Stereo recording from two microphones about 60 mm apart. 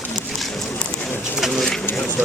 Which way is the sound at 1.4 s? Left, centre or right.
Centre.